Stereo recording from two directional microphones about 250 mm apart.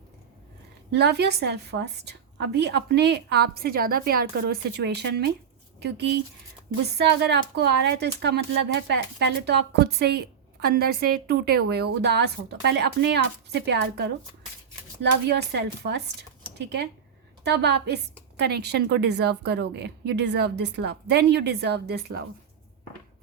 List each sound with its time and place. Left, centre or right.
0.9 s a woman's voice: right